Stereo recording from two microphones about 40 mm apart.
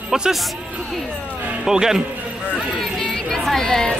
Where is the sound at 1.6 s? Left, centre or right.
Centre.